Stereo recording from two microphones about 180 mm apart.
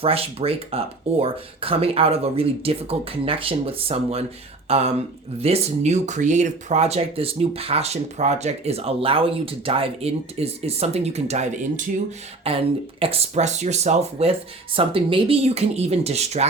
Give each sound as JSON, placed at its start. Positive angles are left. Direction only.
{"t": 0.0, "sound": "speech", "side_deg": -30}